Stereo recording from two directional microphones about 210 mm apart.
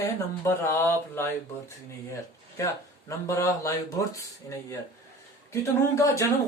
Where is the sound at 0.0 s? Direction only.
10° left (ahead or behind).